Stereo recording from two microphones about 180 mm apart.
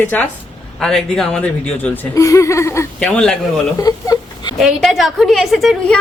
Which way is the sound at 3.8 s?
20° left (ahead or behind).